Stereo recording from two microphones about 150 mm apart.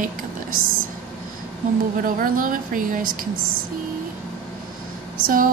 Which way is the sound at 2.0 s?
65° right (ahead or behind).